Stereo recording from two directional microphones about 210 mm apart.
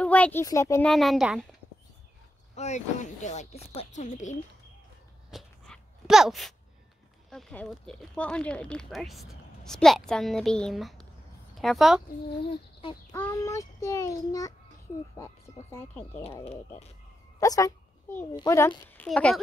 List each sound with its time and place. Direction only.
0.0 s speech: 5° left (ahead or behind)
0.8 s speech: centre (ahead or behind)
2.5 s speech: 35° left (ahead or behind)
5.3 s a sound: centre (ahead or behind)
7.2 s a woman's voice: centre (ahead or behind)
13.1 s a child's voice: 15° left (ahead or behind)
17.4 s a child's voice: 15° left (ahead or behind)